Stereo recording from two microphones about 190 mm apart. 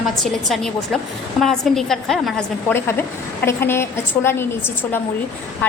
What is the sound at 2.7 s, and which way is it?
A woman's voice, 10° left (ahead or behind).